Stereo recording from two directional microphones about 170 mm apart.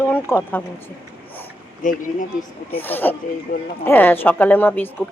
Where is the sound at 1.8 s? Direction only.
50° left (ahead or behind).